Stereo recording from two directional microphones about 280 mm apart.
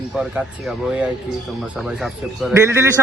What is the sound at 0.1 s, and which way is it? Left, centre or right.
A man's voice, centre.